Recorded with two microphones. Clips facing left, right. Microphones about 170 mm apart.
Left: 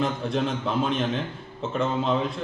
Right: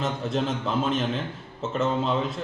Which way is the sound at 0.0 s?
Centre (ahead or behind).